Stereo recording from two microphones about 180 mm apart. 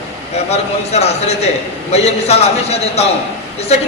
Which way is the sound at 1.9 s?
35° left (ahead or behind).